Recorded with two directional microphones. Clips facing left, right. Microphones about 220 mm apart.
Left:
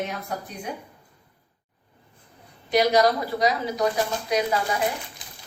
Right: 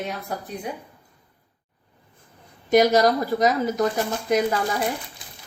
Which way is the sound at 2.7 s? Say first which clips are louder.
Right 3 dB; 45° right (ahead or behind).